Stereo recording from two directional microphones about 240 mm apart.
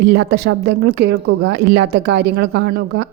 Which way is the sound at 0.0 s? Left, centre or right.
Right.